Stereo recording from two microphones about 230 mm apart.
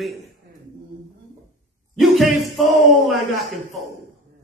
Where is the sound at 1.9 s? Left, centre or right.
Centre.